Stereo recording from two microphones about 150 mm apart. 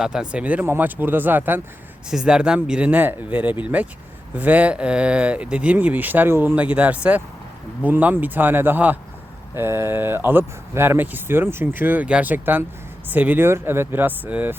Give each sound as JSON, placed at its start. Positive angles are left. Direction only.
{"t": 0.0, "sound": "speech", "side_deg": -5}